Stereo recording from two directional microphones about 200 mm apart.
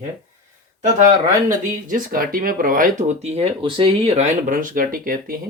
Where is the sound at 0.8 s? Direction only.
40° right (ahead or behind).